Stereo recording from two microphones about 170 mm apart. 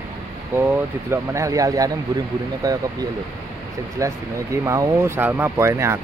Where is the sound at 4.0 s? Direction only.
20° right (ahead or behind).